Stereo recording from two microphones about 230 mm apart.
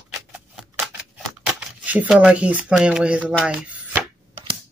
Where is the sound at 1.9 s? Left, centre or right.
Centre.